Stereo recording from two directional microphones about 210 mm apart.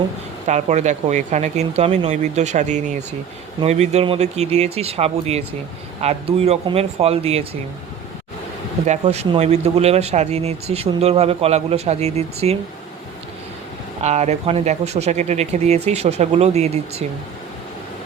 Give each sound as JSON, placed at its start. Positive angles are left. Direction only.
{"t": 0.4, "sound": "speech", "side_deg": -35}
{"t": 8.9, "sound": "speech", "side_deg": -30}
{"t": 14.0, "sound": "speech", "side_deg": -30}